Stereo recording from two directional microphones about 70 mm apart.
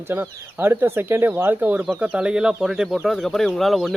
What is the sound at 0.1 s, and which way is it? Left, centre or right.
Speech, right.